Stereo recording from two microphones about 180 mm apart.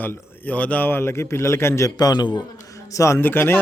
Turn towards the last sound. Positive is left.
turn(degrees=10)  # may be behind; listen again after turning